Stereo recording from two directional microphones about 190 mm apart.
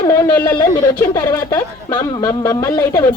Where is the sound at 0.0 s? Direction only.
20° left (ahead or behind).